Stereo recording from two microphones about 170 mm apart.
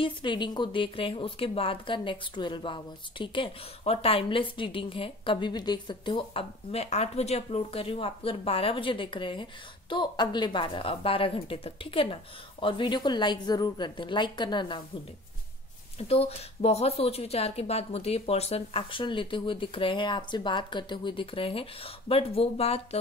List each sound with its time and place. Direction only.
0.0 s a woman's voice: 30° left (ahead or behind)
16.0 s a woman's voice: 35° left (ahead or behind)